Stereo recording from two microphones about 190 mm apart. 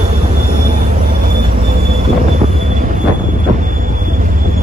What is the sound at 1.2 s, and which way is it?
Train, 50° right (ahead or behind).